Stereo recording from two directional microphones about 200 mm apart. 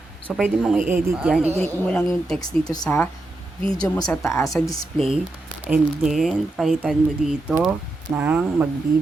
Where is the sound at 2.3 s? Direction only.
20° left (ahead or behind).